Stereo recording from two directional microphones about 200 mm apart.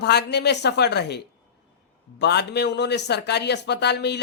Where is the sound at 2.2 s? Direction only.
55° left (ahead or behind).